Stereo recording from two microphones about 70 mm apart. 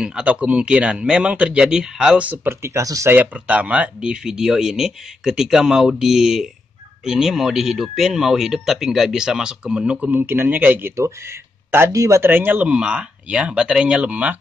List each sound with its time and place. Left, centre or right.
0.0 s speech: centre
2.3 s speech: right
3.1 s speech: right
10.1 s speech: right
11.9 s speech: right
12.2 s speech: right
12.6 s speech: centre